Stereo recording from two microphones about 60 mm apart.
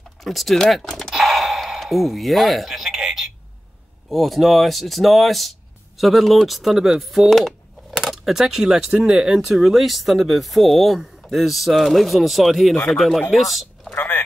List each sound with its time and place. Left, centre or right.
0.2 s speech: centre
1.1 s a sound: centre
4.1 s speech: centre
13.9 s vehicle: left